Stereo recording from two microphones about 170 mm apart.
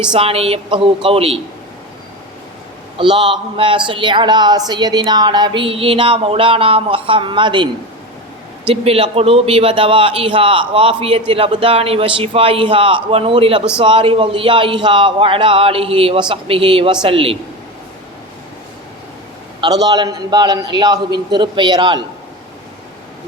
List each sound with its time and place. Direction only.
0.1 s a man's voice: 35° right (ahead or behind)
3.0 s a man's voice: 30° right (ahead or behind)
19.6 s speech: 25° right (ahead or behind)